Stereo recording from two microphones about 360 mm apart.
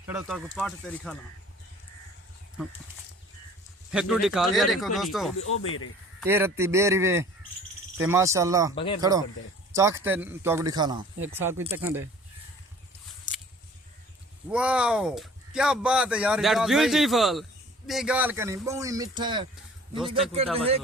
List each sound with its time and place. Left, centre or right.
0.0 s speech: centre
3.9 s speech: centre
5.6 s speech: left
6.1 s speech: centre
8.7 s speech: centre
9.0 s speech: centre
14.5 s speech: centre